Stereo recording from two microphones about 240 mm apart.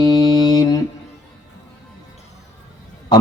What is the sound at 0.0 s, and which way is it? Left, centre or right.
Mantra, centre.